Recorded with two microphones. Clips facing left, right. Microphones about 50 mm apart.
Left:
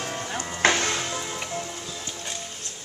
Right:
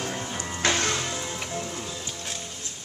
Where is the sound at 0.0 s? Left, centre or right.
Centre.